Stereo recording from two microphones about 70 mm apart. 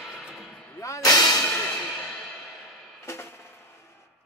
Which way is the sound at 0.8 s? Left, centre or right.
Left.